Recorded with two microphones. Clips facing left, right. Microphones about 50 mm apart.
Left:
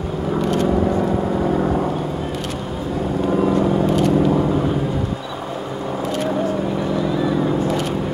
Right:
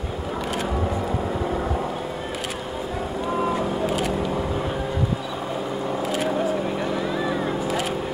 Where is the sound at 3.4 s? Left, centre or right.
Centre.